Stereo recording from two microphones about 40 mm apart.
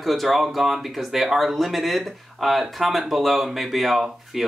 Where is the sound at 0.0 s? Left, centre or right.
Centre.